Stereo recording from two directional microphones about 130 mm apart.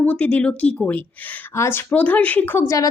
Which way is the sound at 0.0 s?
10° left (ahead or behind).